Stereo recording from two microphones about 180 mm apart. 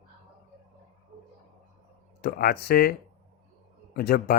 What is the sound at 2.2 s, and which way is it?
A man's voice, 55° left (ahead or behind).